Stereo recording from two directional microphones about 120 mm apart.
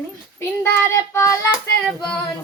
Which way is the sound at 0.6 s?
20° left (ahead or behind).